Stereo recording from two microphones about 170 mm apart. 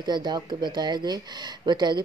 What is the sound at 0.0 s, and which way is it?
Speech, 25° right (ahead or behind).